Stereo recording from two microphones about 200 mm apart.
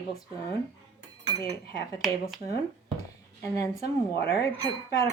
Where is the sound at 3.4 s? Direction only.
15° left (ahead or behind).